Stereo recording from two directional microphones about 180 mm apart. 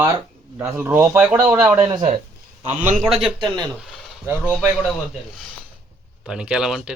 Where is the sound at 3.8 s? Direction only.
Centre (ahead or behind).